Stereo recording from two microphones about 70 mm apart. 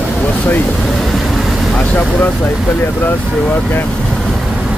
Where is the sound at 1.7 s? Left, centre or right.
Centre.